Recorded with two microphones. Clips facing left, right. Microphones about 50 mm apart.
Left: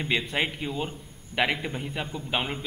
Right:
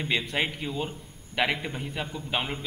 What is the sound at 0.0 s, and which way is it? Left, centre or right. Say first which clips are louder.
A man's voice: left 1 dB; centre.